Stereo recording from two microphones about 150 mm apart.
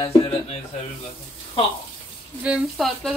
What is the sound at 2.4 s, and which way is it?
Speech, 5° right (ahead or behind).